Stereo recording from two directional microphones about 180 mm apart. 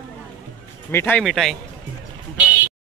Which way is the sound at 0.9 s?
10° left (ahead or behind).